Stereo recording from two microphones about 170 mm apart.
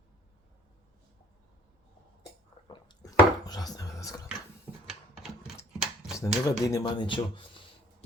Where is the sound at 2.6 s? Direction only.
25° left (ahead or behind).